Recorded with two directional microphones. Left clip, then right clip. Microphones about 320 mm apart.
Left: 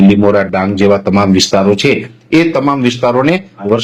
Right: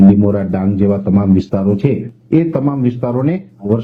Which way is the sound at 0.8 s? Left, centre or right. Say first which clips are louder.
Left 8 dB; centre.